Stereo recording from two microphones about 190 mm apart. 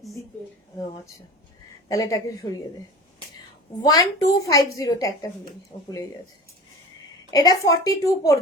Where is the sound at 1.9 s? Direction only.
20° left (ahead or behind).